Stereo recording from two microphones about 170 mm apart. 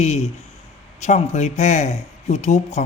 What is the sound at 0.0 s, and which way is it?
Speech, 40° left (ahead or behind).